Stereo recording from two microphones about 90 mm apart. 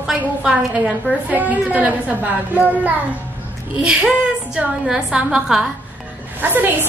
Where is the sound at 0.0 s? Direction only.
10° right (ahead or behind).